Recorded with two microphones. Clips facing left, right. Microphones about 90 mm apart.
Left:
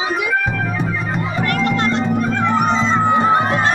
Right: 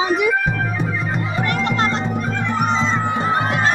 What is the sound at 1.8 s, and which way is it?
Music, 30° right (ahead or behind).